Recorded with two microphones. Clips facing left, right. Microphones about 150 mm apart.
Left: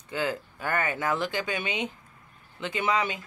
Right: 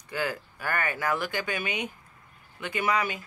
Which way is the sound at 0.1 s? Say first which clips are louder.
Left 1 dB; 20° left (ahead or behind).